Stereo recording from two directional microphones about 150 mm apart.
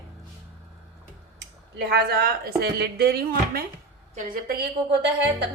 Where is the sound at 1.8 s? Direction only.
90° right.